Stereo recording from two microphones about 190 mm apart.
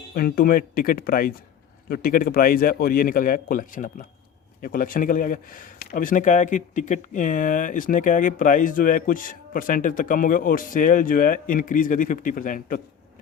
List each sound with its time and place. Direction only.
0.1 s speech: 50° left (ahead or behind)